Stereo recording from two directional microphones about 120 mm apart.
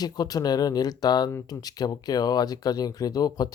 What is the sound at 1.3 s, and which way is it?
Speech, 25° left (ahead or behind).